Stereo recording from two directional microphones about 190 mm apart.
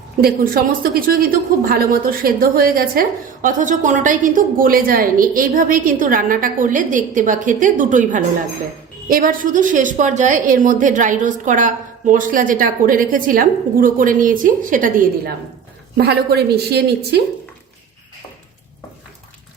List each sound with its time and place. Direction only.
0.2 s a woman's voice: 50° right (ahead or behind)
16.0 s a woman's voice: 60° right (ahead or behind)